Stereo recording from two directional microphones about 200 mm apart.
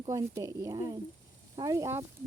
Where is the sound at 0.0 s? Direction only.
15° right (ahead or behind).